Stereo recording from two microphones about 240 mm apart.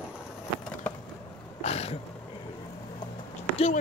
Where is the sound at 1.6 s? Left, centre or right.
Left.